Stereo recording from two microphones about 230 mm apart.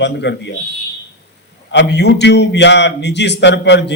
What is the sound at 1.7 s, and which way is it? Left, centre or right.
A man's voice, left.